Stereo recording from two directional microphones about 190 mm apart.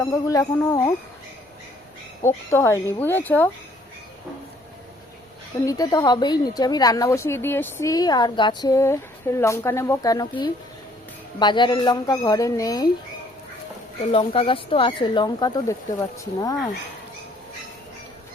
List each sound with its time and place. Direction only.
0.0 s speech: 15° left (ahead or behind)
2.2 s speech: 15° left (ahead or behind)
5.6 s a woman's voice: 20° left (ahead or behind)
14.1 s a woman's voice: 30° left (ahead or behind)